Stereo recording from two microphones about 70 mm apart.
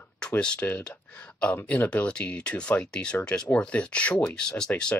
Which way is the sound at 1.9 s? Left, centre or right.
Centre.